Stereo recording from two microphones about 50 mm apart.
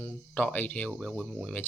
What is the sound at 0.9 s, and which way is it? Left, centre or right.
Speech, centre.